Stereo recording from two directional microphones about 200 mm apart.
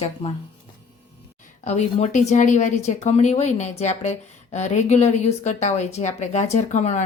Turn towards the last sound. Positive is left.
turn(degrees=35)  # may be behind; listen again after turning